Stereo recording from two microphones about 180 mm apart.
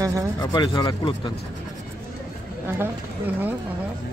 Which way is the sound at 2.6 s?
10° right (ahead or behind).